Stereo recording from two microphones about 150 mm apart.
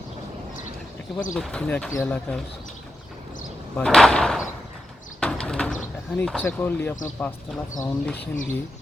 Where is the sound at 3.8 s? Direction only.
5° left (ahead or behind).